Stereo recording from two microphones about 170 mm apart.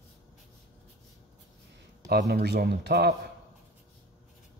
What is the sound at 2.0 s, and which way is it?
Speech, 65° right (ahead or behind).